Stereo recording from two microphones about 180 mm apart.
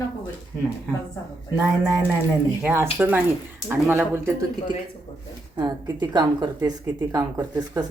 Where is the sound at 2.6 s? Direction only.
15° right (ahead or behind).